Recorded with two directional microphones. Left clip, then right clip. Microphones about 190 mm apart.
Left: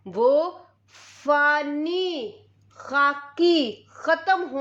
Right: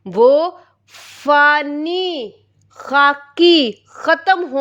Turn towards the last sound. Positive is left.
turn(degrees=-40)  # may be behind; listen again after turning